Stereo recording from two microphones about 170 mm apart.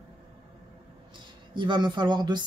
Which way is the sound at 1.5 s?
25° right (ahead or behind).